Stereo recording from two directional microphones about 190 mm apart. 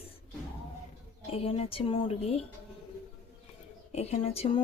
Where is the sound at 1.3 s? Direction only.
30° left (ahead or behind).